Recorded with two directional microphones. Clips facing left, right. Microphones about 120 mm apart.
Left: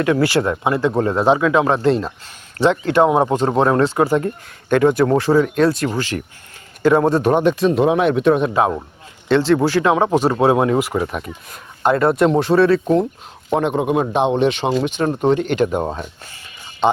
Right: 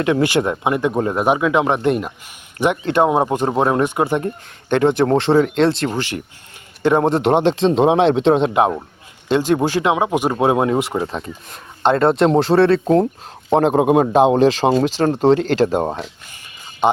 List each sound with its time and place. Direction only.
0.0 s speech: 20° right (ahead or behind)
13.7 s a man's voice: 50° right (ahead or behind); by 15.9 s 30° right (ahead or behind)